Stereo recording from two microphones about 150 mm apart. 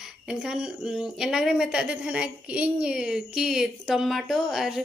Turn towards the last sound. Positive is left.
turn(degrees=0)  # may be behind; listen again after turning